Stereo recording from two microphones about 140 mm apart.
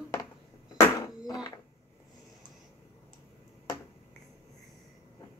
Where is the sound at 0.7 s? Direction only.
20° left (ahead or behind).